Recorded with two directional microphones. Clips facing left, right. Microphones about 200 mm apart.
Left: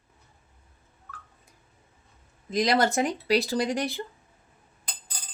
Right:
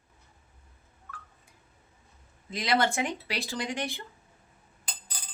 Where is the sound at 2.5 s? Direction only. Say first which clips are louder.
Left 4 dB; 40° left (ahead or behind).